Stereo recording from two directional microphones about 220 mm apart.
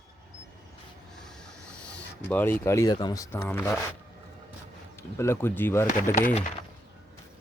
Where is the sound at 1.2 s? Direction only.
5° left (ahead or behind).